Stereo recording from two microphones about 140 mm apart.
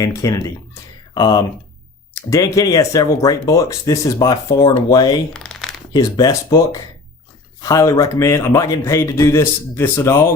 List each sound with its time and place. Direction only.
0.0 s speech: 20° left (ahead or behind)
5.3 s a sound: centre (ahead or behind)
5.9 s speech: 25° left (ahead or behind)